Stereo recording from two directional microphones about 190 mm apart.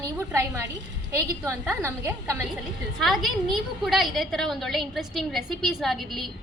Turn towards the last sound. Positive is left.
turn(degrees=0)  # may be behind; listen again after turning